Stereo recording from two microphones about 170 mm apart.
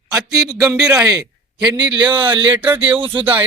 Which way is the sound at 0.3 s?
20° right (ahead or behind).